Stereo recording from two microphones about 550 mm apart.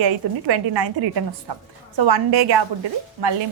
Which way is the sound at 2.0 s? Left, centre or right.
Right.